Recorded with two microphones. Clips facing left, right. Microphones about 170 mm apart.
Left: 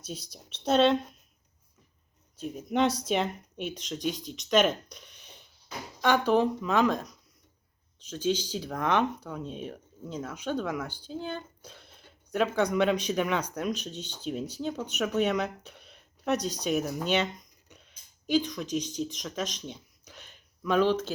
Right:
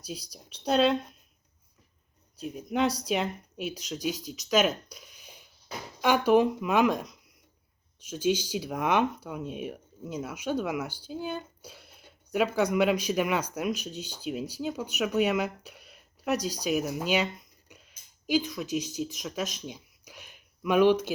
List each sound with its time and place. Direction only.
0.0 s speech: centre (ahead or behind)
2.4 s speech: centre (ahead or behind)
4.9 s a sound: 5° right (ahead or behind)
6.0 s speech: 10° right (ahead or behind)